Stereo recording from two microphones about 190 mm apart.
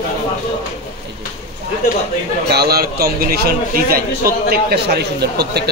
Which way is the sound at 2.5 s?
55° right (ahead or behind).